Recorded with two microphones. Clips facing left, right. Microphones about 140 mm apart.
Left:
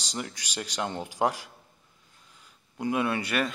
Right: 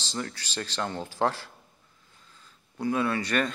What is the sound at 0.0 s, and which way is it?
Speech, 15° left (ahead or behind).